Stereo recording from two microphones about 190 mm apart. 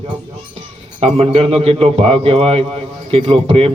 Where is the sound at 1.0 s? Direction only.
30° right (ahead or behind).